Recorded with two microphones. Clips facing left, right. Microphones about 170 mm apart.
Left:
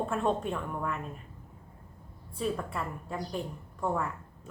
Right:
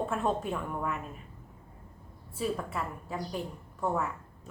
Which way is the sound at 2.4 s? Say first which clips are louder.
Even; 5° right (ahead or behind).